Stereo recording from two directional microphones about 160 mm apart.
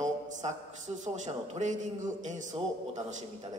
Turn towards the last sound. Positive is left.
turn(degrees=-50)  # may be behind; listen again after turning